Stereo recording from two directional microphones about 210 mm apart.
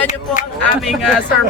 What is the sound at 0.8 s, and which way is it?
Speech, centre (ahead or behind).